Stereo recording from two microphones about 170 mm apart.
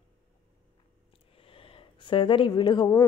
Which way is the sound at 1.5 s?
30° left (ahead or behind).